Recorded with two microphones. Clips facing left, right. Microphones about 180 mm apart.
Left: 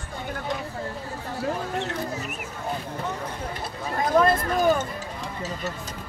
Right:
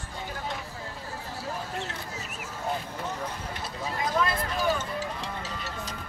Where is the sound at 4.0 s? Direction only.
50° left (ahead or behind).